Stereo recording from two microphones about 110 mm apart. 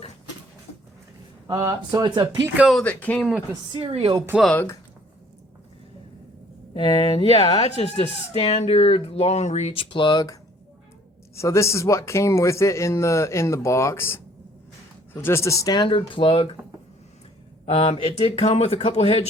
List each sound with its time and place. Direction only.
1.6 s speech: 40° right (ahead or behind)
2.8 s speech: 15° left (ahead or behind)
3.5 s a woman's voice: 50° right (ahead or behind)
6.7 s speech: 50° left (ahead or behind); by 9.7 s 85° left
9.7 s speech: 50° left (ahead or behind)
11.3 s speech: 25° left (ahead or behind); by 16.5 s 55° left (ahead or behind)
17.7 s speech: 65° left (ahead or behind)